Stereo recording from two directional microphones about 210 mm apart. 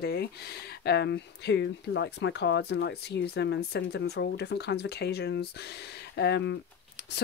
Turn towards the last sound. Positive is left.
turn(degrees=55)  # may be behind; listen again after turning